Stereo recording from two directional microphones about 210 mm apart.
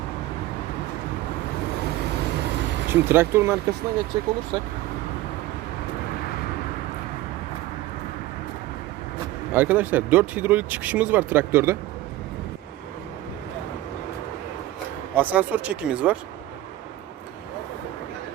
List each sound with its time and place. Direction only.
2.9 s speech: 10° right (ahead or behind)
9.5 s speech: 10° right (ahead or behind)
15.1 s speech: 5° right (ahead or behind)